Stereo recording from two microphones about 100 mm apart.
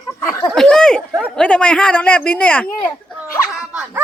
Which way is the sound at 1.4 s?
10° left (ahead or behind).